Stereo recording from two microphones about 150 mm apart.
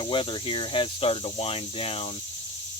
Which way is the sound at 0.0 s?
35° left (ahead or behind).